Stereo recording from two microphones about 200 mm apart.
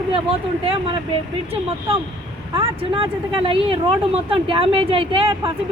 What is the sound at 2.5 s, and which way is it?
A woman's voice, 25° right (ahead or behind).